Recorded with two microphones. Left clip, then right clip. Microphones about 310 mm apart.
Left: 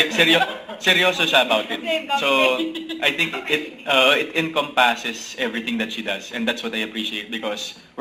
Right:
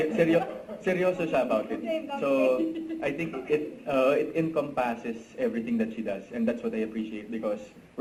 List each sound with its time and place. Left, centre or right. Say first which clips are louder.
0.2 s a man's voice: left 6 dB; centre